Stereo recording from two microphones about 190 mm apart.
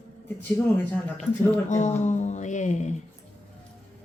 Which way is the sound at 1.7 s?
40° left (ahead or behind).